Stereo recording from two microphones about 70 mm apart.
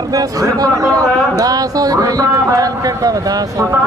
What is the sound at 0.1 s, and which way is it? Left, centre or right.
Speech, right.